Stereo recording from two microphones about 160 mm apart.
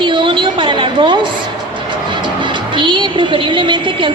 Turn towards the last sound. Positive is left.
turn(degrees=-30)  # may be behind; listen again after turning